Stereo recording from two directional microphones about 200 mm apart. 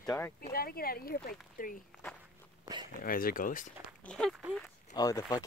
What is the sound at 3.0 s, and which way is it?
Speech, 45° left (ahead or behind).